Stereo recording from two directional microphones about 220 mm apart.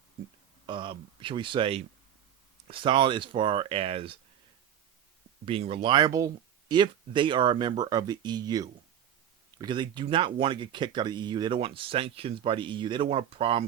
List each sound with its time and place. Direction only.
0.7 s speech: 20° right (ahead or behind)
5.5 s speech: 25° right (ahead or behind)